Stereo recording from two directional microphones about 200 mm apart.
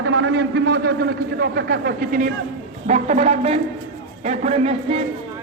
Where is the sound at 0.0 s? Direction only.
70° right (ahead or behind).